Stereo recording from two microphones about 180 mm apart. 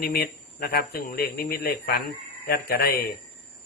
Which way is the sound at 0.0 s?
60° left (ahead or behind).